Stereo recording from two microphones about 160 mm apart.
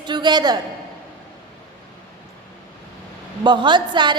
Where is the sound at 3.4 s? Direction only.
30° right (ahead or behind).